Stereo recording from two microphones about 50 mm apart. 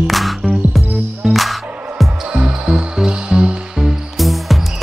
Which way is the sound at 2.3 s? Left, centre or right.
Right.